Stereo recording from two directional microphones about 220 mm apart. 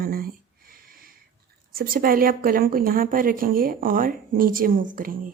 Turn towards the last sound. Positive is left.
turn(degrees=-40)  # may be behind; listen again after turning